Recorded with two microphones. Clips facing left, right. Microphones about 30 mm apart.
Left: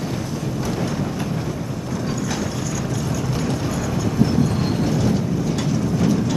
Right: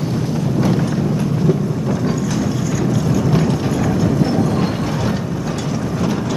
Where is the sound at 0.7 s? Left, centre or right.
Centre.